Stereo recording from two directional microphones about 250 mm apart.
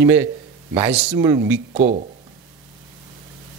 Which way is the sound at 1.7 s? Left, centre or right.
Right.